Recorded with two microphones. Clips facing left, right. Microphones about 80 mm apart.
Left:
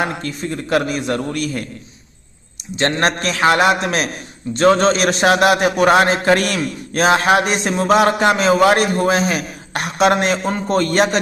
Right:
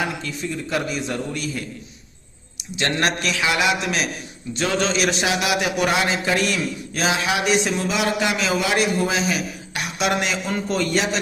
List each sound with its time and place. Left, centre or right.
0.0 s a man's voice: left
2.7 s a man's voice: left